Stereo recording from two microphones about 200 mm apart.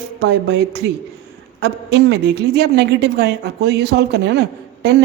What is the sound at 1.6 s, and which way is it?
A woman's voice, 60° right (ahead or behind).